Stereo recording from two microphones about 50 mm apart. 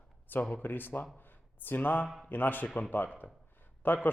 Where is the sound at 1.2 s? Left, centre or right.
Left.